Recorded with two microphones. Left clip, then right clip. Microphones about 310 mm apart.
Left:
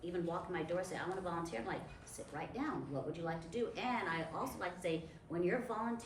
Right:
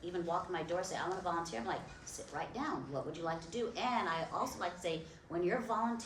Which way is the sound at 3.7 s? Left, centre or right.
Centre.